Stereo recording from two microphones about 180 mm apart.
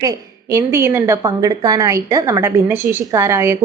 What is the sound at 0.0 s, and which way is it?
A woman's voice, 15° right (ahead or behind).